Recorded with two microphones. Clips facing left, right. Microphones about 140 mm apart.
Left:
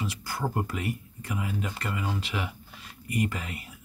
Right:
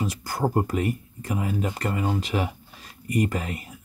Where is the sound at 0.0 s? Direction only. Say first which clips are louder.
Right 6 dB; 45° right (ahead or behind).